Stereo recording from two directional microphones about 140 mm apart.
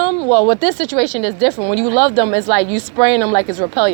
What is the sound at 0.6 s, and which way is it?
Speech, 45° left (ahead or behind).